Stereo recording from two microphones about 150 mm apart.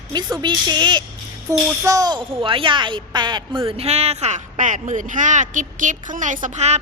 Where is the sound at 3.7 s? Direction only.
45° right (ahead or behind).